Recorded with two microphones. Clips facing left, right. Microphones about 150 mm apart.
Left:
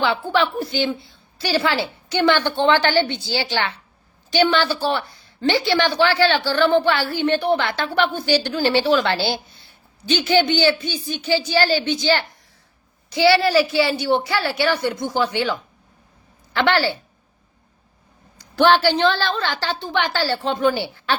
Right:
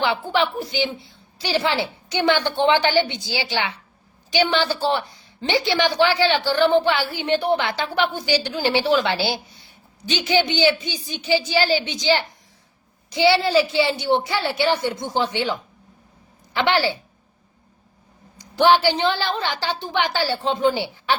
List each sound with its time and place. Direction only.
0.0 s a woman's voice: 15° right (ahead or behind)
18.3 s a woman's voice: 15° right (ahead or behind)